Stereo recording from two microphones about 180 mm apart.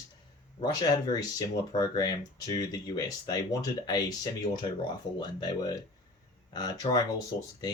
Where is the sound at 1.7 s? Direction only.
20° left (ahead or behind).